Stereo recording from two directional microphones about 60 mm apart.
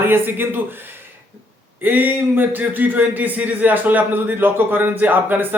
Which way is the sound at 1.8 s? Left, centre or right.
Right.